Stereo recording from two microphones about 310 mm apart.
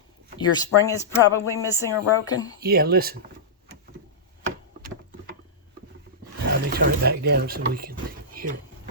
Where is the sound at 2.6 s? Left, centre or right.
Right.